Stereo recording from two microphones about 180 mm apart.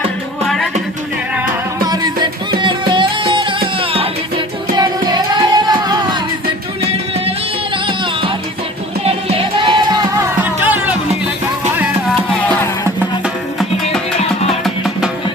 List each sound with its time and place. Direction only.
0.4 s music: centre (ahead or behind)
1.8 s music: 20° right (ahead or behind)
9.6 s music: 25° right (ahead or behind)
10.6 s music: 10° right (ahead or behind)
14.6 s music: centre (ahead or behind)